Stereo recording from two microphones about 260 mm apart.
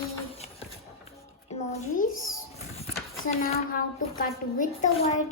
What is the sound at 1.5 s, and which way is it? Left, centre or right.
A child's voice, left.